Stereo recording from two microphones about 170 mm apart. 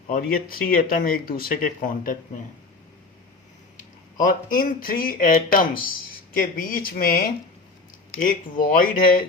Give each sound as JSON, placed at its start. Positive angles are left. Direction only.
{"t": 0.1, "sound": "speech", "side_deg": 60}
{"t": 3.8, "sound": "speech", "side_deg": 50}